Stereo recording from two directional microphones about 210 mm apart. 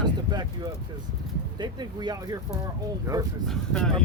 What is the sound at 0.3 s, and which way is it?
Speech, 20° right (ahead or behind).